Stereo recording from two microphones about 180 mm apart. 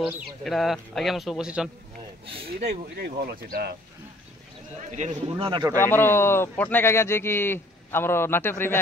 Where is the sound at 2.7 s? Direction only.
65° right (ahead or behind).